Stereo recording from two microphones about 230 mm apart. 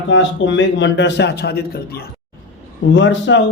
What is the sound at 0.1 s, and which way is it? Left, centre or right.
Speech, left.